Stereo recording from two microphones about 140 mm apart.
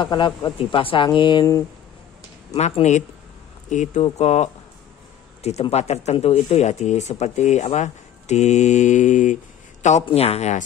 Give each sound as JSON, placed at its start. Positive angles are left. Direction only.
{"t": 0.0, "sound": "speech", "side_deg": 35}
{"t": 2.5, "sound": "speech", "side_deg": 50}
{"t": 10.0, "sound": "speech", "side_deg": 45}